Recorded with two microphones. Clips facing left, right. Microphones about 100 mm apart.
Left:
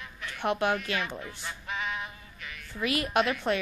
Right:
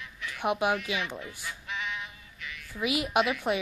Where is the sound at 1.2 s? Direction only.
40° left (ahead or behind).